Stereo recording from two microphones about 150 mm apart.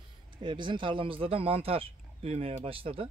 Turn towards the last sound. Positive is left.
turn(degrees=-40)  # may be behind; listen again after turning